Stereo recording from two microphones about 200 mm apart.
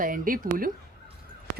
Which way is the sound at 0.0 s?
45° right (ahead or behind).